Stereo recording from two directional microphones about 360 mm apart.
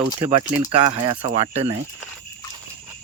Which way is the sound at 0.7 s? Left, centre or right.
Centre.